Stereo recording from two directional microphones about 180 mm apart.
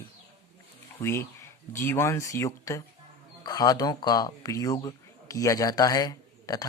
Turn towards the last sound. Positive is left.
turn(degrees=20)  # may be behind; listen again after turning